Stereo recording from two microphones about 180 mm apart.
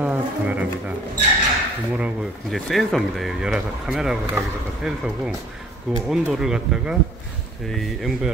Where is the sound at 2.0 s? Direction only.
5° right (ahead or behind).